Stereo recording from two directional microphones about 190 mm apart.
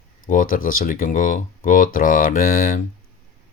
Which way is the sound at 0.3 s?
45° left (ahead or behind).